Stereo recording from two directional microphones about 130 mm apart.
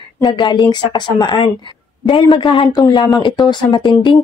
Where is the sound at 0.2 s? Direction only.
35° left (ahead or behind).